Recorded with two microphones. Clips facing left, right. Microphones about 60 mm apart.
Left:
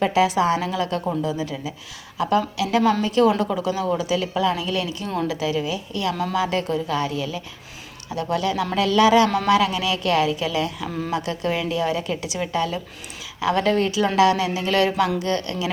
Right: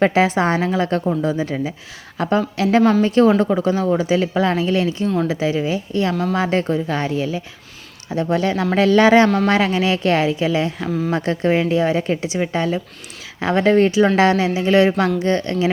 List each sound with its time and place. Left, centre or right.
0.0 s a woman's voice: right
10.8 s speech: centre
11.1 s a woman's voice: right